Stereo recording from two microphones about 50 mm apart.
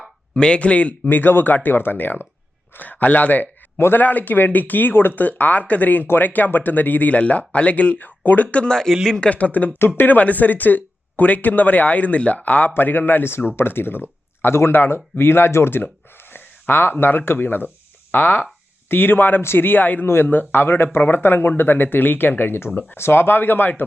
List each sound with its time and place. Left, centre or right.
0.3 s speech: left
1.0 s speech: left
2.7 s speech: left
8.7 s a man's voice: centre
9.3 s speech: left